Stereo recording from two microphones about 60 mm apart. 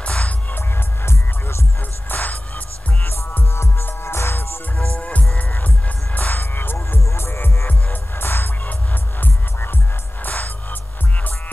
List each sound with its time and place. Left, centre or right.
0.0 s music: left
2.0 s music: left
4.9 s music: left
10.2 s music: left